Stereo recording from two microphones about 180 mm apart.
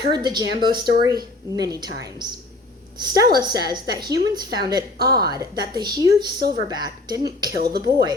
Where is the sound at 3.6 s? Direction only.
20° right (ahead or behind).